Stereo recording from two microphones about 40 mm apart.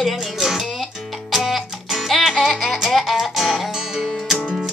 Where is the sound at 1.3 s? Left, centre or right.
Centre.